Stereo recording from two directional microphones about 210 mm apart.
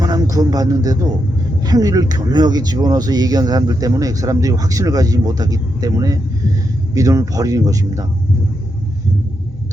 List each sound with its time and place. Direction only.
0.0 s speech: 15° right (ahead or behind)